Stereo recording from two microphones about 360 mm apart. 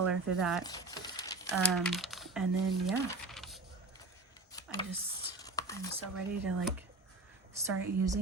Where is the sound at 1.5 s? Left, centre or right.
Centre.